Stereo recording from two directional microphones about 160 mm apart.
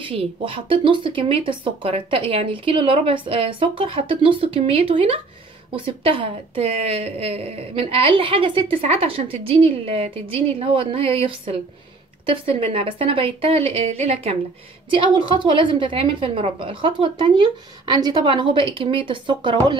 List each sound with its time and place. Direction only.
0.0 s speech: 35° right (ahead or behind)
14.9 s speech: 30° right (ahead or behind)